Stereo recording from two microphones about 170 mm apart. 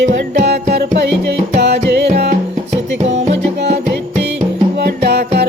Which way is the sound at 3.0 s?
40° right (ahead or behind).